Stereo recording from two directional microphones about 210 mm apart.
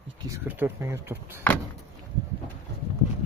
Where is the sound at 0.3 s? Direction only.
10° right (ahead or behind).